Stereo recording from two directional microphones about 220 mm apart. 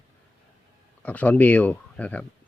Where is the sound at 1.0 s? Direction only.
5° left (ahead or behind).